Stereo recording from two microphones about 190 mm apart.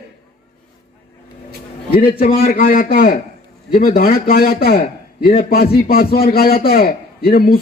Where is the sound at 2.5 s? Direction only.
50° left (ahead or behind).